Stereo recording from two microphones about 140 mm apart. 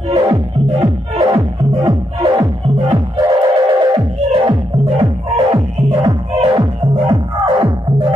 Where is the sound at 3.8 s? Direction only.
30° right (ahead or behind).